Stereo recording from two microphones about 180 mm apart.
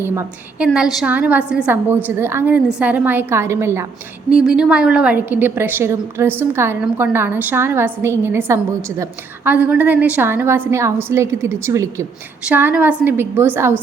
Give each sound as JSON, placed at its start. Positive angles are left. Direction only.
{"t": 0.0, "sound": "a woman's voice", "side_deg": -15}
{"t": 0.7, "sound": "a woman's voice", "side_deg": -5}